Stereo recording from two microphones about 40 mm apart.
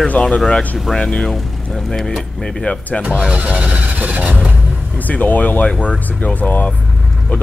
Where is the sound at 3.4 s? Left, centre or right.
Right.